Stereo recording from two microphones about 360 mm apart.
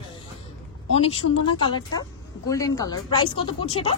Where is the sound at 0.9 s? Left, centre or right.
Centre.